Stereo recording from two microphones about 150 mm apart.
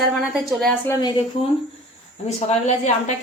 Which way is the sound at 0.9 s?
25° left (ahead or behind).